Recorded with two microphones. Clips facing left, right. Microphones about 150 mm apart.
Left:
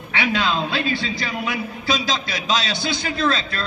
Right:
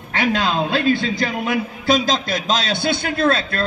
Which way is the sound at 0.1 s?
45° right (ahead or behind).